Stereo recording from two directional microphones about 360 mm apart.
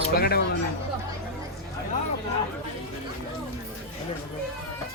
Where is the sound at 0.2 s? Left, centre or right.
Left.